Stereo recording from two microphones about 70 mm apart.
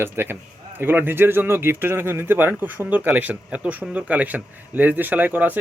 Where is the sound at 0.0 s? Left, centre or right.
Right.